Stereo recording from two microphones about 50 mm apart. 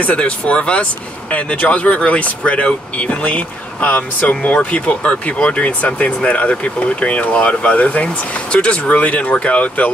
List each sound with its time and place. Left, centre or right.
0.0 s speech: left